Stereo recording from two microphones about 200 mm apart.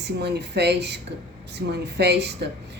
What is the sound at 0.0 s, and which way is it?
A woman's voice, 55° right (ahead or behind).